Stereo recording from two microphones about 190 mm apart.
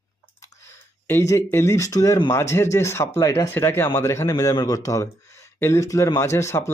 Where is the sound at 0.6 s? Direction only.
15° left (ahead or behind).